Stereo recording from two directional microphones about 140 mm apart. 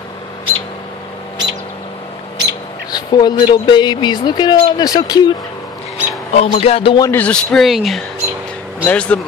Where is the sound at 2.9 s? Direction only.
30° left (ahead or behind).